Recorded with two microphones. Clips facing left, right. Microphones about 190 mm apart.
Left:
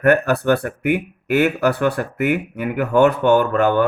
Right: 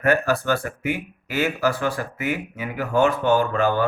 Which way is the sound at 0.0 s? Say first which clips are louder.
Left 5 dB; 65° left (ahead or behind).